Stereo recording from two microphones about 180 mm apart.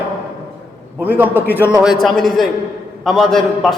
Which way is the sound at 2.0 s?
Centre (ahead or behind).